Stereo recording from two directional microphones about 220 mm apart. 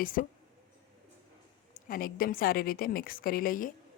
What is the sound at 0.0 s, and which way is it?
Speech, 40° left (ahead or behind).